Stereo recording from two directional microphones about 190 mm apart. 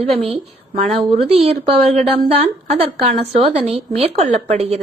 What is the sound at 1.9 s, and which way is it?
A woman's voice, 30° right (ahead or behind).